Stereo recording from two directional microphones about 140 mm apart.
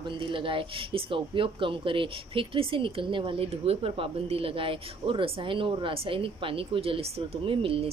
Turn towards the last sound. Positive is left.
turn(degrees=-40)  # may be behind; listen again after turning